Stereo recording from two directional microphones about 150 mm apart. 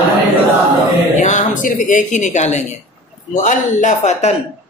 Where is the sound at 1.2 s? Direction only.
55° left (ahead or behind).